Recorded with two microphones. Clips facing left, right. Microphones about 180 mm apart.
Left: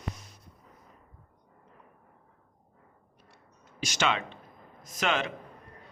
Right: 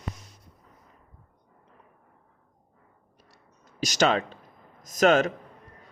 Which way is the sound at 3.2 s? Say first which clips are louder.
Left 1 dB; 40° right (ahead or behind).